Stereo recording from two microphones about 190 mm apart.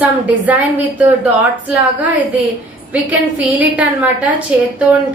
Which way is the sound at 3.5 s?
10° right (ahead or behind).